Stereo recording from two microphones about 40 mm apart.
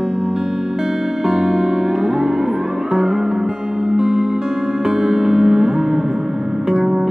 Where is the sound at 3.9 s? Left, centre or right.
Centre.